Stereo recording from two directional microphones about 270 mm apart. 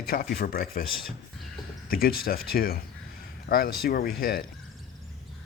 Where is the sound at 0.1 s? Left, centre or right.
Left.